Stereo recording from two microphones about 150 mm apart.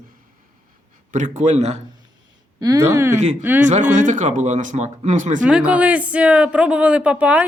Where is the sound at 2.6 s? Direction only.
25° right (ahead or behind).